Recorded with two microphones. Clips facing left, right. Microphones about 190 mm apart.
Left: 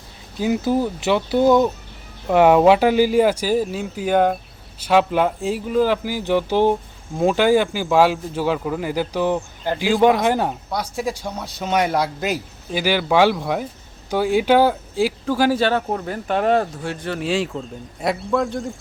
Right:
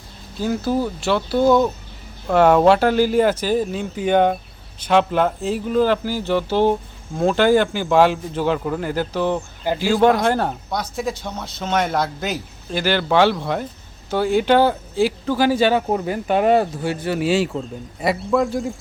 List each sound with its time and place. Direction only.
0.3 s speech: 15° left (ahead or behind)
7.7 s speech: centre (ahead or behind)
9.7 s speech: 10° right (ahead or behind)
10.0 s speech: 5° left (ahead or behind)